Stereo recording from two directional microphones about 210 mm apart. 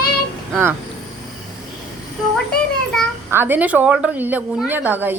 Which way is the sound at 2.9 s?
5° left (ahead or behind).